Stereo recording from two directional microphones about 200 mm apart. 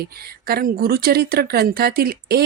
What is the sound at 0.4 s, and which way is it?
Speech, 50° right (ahead or behind).